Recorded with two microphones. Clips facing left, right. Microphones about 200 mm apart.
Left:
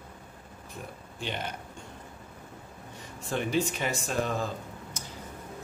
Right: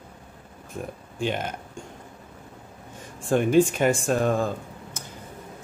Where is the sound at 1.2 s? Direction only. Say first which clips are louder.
Right 8 dB; 45° right (ahead or behind).